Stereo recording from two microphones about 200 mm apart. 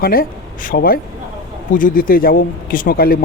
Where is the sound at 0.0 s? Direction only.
45° left (ahead or behind).